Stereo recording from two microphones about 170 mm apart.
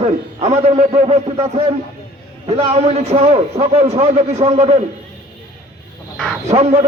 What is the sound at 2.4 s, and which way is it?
A man's voice, 40° right (ahead or behind).